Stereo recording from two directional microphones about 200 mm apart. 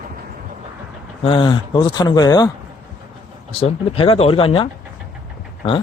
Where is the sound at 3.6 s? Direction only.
30° left (ahead or behind).